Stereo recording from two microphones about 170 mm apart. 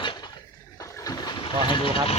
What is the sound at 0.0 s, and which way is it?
Dishes, 30° left (ahead or behind).